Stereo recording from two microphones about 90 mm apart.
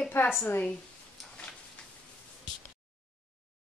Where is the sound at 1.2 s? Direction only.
Centre (ahead or behind).